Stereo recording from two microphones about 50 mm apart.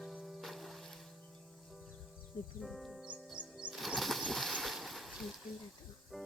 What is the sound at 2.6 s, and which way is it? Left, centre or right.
Music, centre.